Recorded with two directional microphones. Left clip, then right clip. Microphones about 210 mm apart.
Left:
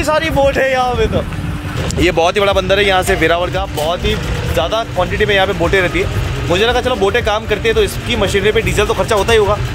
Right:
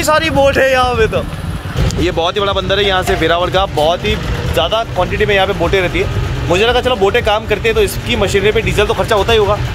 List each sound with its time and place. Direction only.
0.0 s a man's voice: 25° right (ahead or behind)
2.0 s speech: 15° left (ahead or behind)